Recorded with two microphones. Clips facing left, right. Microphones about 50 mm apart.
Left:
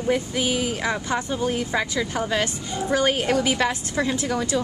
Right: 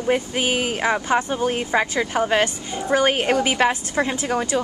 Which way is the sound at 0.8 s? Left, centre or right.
Right.